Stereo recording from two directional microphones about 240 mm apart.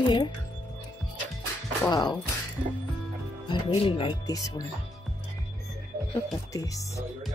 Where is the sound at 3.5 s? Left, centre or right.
Left.